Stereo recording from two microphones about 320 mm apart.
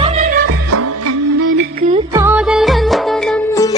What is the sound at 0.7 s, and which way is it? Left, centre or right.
Music, right.